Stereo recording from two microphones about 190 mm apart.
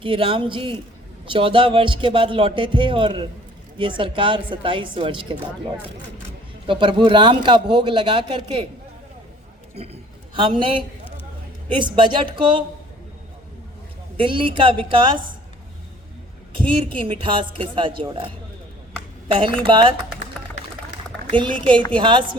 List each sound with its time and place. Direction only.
0.0 s a man's voice: 25° right (ahead or behind)
6.7 s a man's voice: 25° right (ahead or behind)
9.7 s a man's voice: 35° right (ahead or behind)
14.2 s a man's voice: 25° right (ahead or behind)
16.6 s a man's voice: 25° right (ahead or behind)
19.3 s a man's voice: 25° right (ahead or behind)
21.2 s a woman's voice: 25° right (ahead or behind)